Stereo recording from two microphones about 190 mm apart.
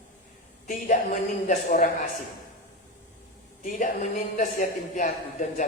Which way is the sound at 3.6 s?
45° left (ahead or behind).